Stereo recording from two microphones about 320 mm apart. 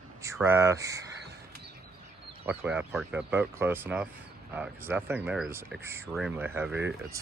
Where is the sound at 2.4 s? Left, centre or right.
Centre.